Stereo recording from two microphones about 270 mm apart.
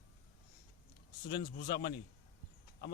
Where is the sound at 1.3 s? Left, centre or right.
Left.